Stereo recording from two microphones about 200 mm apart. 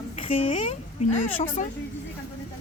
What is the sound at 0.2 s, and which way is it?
Speech, 30° left (ahead or behind).